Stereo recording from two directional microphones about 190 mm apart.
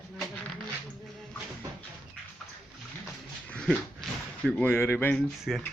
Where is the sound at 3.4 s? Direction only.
5° left (ahead or behind).